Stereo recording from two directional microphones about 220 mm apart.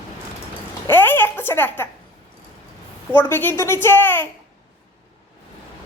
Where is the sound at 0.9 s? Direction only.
10° left (ahead or behind).